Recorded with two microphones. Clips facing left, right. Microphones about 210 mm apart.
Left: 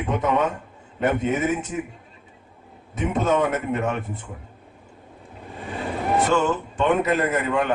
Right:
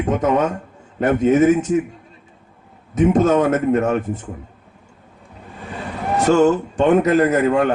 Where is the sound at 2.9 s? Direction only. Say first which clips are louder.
Right 7 dB; 40° right (ahead or behind).